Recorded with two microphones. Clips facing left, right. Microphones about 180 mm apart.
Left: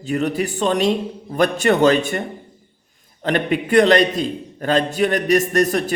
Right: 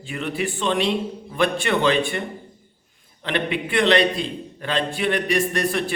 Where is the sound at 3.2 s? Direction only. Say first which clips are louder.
Left 5 dB; 45° left (ahead or behind).